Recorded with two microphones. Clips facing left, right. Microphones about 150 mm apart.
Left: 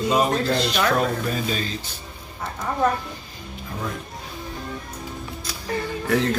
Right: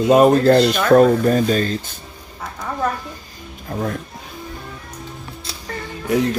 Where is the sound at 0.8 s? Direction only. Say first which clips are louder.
Right 10 dB; 45° right (ahead or behind).